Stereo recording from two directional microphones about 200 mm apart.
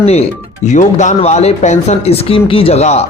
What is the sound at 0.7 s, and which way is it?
Speech, 35° left (ahead or behind).